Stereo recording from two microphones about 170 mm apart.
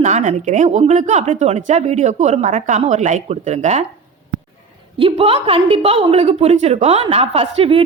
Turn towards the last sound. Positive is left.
turn(degrees=-35)  # may be behind; listen again after turning